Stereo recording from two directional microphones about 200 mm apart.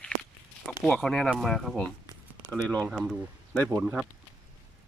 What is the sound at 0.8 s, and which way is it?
Speech, 5° left (ahead or behind).